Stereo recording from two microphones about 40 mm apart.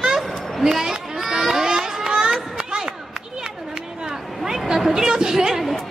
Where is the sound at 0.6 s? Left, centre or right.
Centre.